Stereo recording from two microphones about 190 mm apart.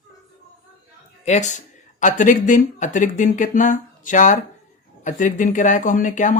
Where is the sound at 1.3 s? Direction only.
40° left (ahead or behind).